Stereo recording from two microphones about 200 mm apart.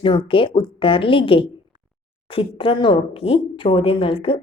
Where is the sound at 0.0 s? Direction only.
25° left (ahead or behind).